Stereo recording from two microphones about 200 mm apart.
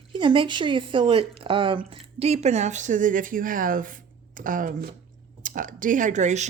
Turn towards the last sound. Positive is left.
turn(degrees=-35)  # may be behind; listen again after turning